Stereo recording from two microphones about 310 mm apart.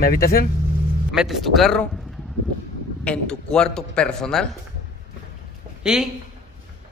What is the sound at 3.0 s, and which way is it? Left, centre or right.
A man's voice, centre.